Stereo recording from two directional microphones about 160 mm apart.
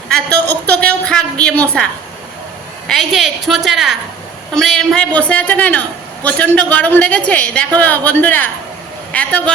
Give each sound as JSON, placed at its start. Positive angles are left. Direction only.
{"t": 0.1, "sound": "a woman's voice", "side_deg": 10}